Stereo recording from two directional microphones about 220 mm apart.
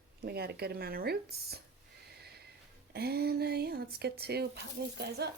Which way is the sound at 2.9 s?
45° right (ahead or behind).